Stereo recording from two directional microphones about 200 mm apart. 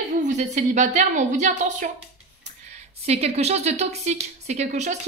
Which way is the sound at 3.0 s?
30° right (ahead or behind).